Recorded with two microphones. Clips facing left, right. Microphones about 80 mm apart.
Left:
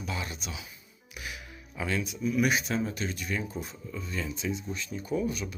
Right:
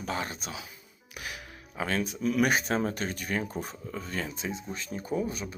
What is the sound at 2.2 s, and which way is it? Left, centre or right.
Speech, right.